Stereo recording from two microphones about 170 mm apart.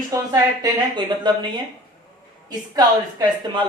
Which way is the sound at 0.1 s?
20° right (ahead or behind).